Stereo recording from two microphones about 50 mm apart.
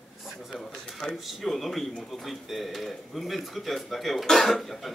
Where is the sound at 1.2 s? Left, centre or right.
Centre.